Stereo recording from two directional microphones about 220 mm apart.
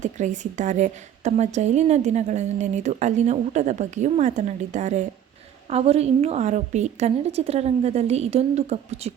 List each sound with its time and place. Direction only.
0.0 s a woman's voice: 35° right (ahead or behind)